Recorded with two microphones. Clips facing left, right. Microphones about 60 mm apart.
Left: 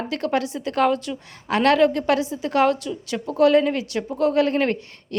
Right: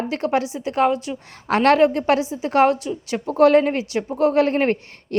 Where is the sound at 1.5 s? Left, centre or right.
Right.